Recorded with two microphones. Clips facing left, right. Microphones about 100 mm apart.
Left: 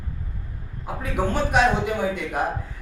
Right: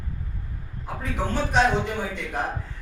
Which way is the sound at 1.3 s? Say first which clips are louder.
Left 1 dB; 10° left (ahead or behind).